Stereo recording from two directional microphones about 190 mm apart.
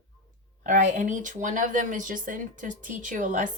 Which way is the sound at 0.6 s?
40° right (ahead or behind).